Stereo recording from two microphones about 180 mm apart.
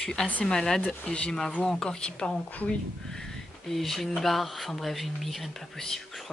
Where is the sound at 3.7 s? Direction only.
Centre (ahead or behind).